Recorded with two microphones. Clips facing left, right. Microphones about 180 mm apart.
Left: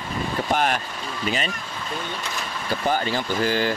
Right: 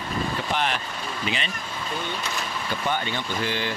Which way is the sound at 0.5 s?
45° left (ahead or behind).